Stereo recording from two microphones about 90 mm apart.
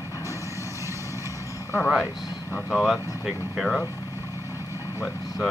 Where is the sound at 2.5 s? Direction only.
25° left (ahead or behind).